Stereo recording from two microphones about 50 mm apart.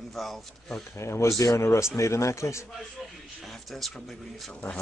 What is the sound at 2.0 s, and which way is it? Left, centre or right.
Speech, left.